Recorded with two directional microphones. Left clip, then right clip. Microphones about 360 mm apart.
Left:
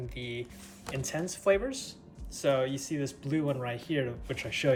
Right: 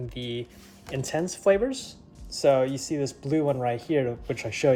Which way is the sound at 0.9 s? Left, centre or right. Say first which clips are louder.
Right 6 dB; right.